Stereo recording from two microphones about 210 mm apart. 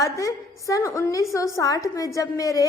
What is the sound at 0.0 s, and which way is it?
A woman's voice, 15° left (ahead or behind).